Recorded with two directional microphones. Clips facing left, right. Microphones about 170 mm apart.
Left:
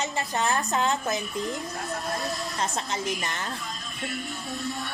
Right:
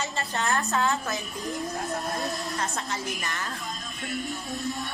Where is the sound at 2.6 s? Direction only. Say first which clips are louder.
Left 2 dB; 20° left (ahead or behind).